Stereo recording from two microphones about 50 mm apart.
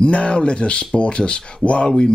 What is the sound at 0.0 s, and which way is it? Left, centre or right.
Speech, left.